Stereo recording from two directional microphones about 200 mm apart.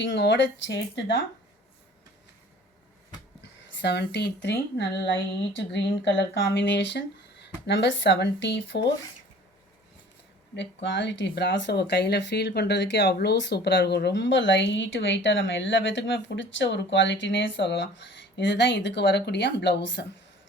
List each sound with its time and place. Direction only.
0.0 s speech: 65° left (ahead or behind)
3.8 s speech: 60° left (ahead or behind)
10.8 s speech: 65° left (ahead or behind)